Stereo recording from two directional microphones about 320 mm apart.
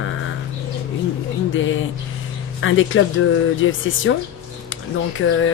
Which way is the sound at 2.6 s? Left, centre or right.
Left.